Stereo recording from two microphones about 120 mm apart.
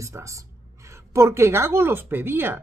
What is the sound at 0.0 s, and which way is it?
A woman's voice, 25° right (ahead or behind).